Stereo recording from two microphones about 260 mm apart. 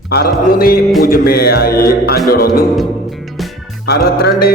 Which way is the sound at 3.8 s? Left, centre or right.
Left.